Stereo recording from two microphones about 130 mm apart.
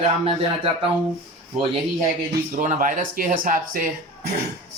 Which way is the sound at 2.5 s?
85° right.